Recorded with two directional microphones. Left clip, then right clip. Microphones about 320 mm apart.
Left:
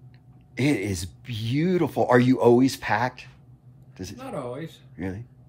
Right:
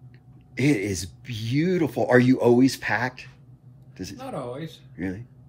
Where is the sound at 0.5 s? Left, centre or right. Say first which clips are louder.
Right 1 dB; left.